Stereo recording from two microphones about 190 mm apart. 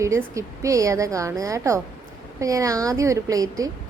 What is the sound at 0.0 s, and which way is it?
Speech, 15° right (ahead or behind).